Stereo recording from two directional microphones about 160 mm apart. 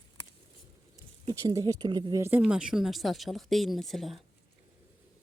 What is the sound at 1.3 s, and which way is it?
Speech, 20° right (ahead or behind).